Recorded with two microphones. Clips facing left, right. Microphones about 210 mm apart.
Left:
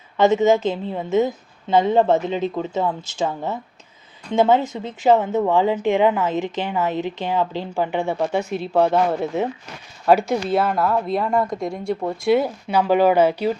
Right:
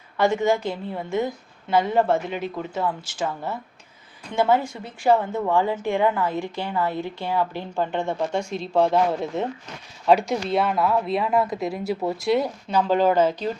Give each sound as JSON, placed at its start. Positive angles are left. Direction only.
{"t": 0.2, "sound": "a woman's voice", "side_deg": 20}